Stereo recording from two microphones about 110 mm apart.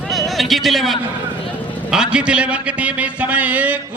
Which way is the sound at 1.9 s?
10° right (ahead or behind).